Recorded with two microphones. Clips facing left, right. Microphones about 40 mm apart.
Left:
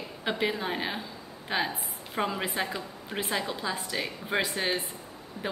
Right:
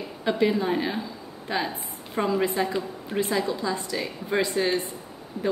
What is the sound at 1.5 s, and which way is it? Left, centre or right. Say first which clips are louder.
Speech: right 2 dB; left.